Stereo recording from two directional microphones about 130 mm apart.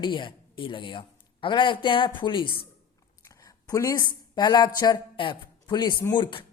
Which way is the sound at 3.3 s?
25° left (ahead or behind).